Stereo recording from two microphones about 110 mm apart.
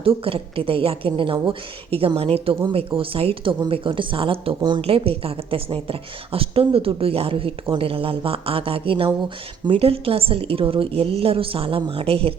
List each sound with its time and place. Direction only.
0.0 s a woman's voice: 55° right (ahead or behind)